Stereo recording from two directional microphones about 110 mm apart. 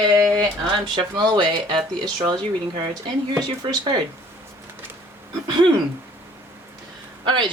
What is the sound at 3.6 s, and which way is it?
Speech, 45° right (ahead or behind).